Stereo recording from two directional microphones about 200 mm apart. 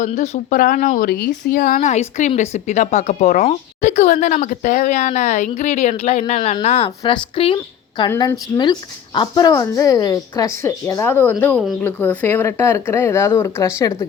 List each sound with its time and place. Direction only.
0.0 s a woman's voice: 40° left (ahead or behind); by 13.9 s 15° left (ahead or behind)